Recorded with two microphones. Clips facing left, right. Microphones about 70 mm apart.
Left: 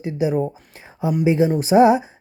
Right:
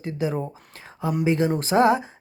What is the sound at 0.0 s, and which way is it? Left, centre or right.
Speech, centre.